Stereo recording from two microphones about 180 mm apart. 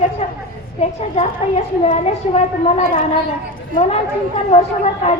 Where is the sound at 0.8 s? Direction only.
35° left (ahead or behind).